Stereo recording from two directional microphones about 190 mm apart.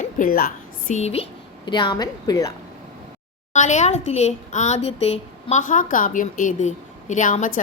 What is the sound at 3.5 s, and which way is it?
A woman's voice, 40° left (ahead or behind).